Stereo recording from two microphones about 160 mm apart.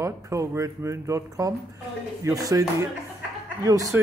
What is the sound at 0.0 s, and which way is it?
A man's voice, 20° right (ahead or behind).